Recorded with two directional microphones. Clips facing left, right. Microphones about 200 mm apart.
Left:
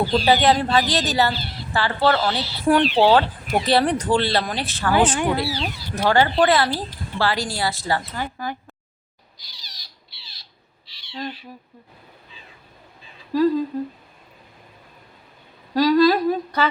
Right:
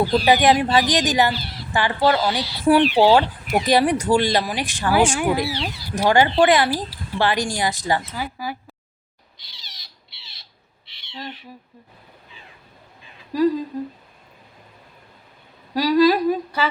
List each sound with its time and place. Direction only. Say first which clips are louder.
0.0 s speech: right 1 dB; 10° right (ahead or behind)
10.8 s owl: left 4 dB; 25° right (ahead or behind)
13.3 s speech: even; 15° right (ahead or behind)
15.7 s speech: even; 10° right (ahead or behind)